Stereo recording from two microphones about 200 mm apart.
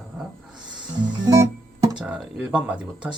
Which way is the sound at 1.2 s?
15° right (ahead or behind).